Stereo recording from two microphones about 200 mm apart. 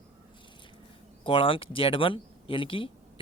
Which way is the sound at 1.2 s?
25° left (ahead or behind).